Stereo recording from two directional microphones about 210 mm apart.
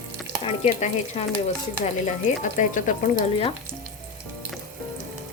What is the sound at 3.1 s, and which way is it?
Speech, 25° left (ahead or behind).